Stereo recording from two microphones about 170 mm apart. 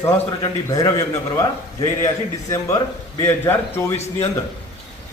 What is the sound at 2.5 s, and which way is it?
A man's voice, 20° left (ahead or behind).